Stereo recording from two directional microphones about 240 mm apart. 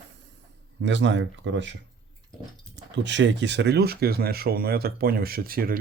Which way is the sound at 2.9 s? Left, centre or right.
Right.